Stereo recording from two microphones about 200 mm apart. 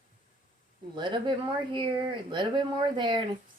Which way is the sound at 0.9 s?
25° right (ahead or behind).